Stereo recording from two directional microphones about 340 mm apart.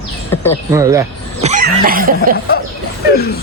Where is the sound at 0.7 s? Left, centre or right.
Centre.